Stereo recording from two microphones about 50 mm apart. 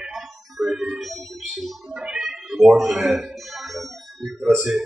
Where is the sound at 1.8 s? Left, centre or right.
Centre.